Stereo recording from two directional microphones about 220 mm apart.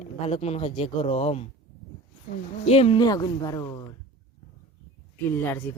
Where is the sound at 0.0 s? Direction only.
30° left (ahead or behind).